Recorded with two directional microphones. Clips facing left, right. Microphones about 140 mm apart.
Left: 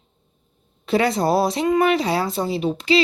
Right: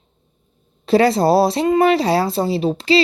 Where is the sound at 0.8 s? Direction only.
35° right (ahead or behind).